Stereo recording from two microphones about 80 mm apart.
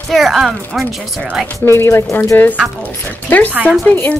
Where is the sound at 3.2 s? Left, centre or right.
Left.